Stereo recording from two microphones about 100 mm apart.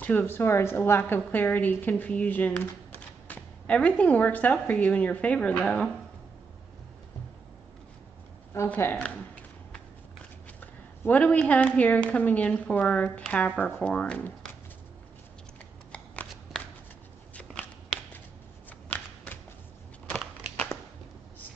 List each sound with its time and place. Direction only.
0.0 s a woman's voice: 15° left (ahead or behind)
8.6 s speech: 20° left (ahead or behind)
10.6 s a woman's voice: 15° left (ahead or behind)
16.5 s shuffling cards: centre (ahead or behind)
17.4 s a sound: 10° left (ahead or behind)
18.9 s shuffling cards: 15° left (ahead or behind)